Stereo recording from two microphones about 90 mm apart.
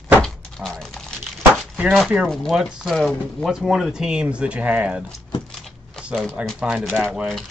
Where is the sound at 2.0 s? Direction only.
Centre (ahead or behind).